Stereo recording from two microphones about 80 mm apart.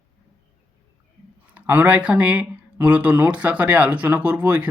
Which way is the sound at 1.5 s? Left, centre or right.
Right.